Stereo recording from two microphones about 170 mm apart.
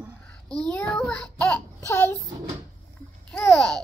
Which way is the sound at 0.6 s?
5° left (ahead or behind).